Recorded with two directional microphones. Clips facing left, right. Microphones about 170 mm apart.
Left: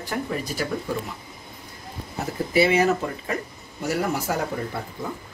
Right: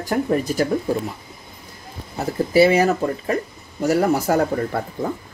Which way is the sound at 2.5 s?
35° right (ahead or behind).